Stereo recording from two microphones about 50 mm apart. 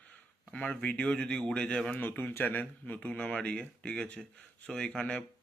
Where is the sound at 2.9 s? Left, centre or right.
Centre.